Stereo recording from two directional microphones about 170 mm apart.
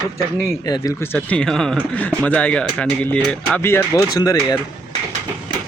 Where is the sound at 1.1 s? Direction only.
5° left (ahead or behind).